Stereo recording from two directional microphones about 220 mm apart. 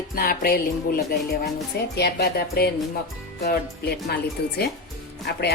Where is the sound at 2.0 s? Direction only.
45° left (ahead or behind).